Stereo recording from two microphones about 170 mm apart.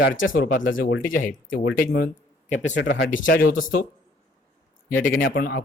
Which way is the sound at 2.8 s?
90° left.